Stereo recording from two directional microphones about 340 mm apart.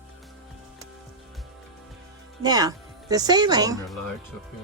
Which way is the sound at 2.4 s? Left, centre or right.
Centre.